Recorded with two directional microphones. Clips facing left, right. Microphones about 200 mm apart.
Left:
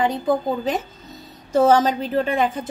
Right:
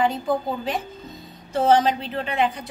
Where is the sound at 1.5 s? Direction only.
45° left (ahead or behind).